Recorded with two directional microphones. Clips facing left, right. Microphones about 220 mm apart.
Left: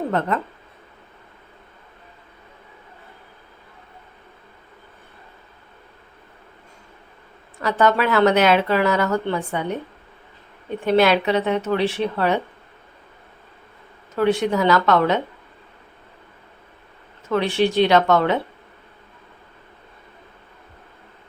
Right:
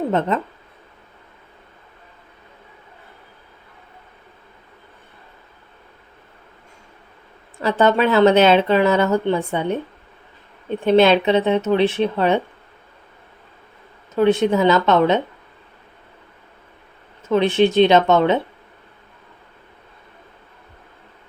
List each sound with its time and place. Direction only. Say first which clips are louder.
0.1 s speech: right 3 dB; 20° right (ahead or behind)
7.6 s speech: right 3 dB; 25° right (ahead or behind)
10.8 s speech: right 3 dB; 25° right (ahead or behind)
14.2 s speech: right 3 dB; 20° right (ahead or behind)
17.2 s speech: right 4 dB; 20° right (ahead or behind)